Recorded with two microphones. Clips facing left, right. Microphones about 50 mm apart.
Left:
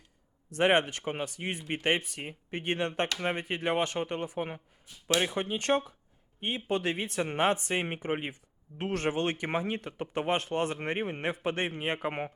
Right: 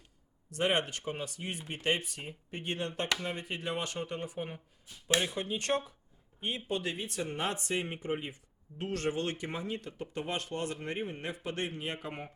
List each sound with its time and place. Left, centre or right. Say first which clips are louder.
0.5 s speech: left 5 dB; left